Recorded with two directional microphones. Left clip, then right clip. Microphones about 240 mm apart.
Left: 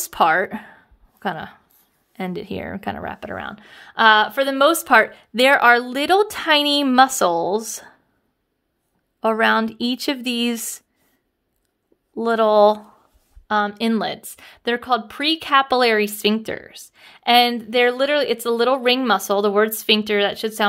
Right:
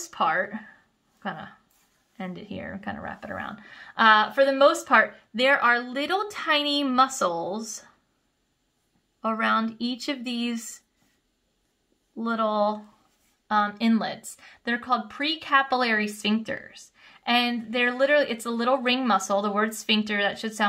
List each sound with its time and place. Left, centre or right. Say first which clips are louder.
0.0 s a sound: left 8 dB; left
2.1 s speech: left 9 dB; left
9.2 s speech: left 7 dB; left
12.2 s speech: left 10 dB; left
13.5 s a woman's voice: left 4 dB; left